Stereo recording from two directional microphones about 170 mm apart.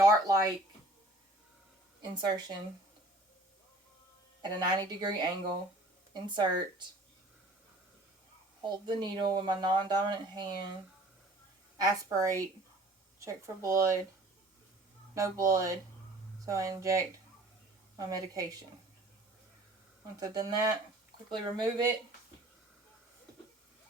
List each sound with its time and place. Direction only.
0.0 s speech: 20° right (ahead or behind)
2.0 s speech: 25° right (ahead or behind)
4.4 s speech: 25° right (ahead or behind)
8.6 s speech: 25° right (ahead or behind)
11.8 s speech: 20° right (ahead or behind)
15.1 s speech: 20° right (ahead or behind)
18.1 s speech: 20° right (ahead or behind)
20.1 s speech: 20° right (ahead or behind)